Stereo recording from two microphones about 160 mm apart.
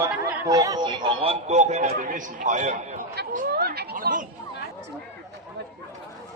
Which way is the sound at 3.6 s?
75° right (ahead or behind).